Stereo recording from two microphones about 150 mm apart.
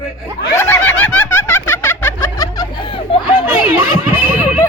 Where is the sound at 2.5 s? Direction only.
35° left (ahead or behind).